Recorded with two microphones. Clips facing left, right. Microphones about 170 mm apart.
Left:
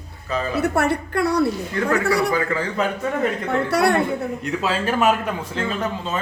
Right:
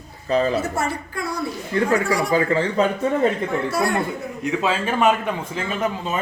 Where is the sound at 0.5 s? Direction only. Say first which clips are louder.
Left 3 dB; 65° left (ahead or behind).